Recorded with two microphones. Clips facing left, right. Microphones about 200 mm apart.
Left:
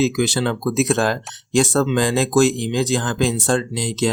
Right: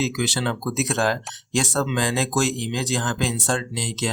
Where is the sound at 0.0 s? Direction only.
50° left (ahead or behind).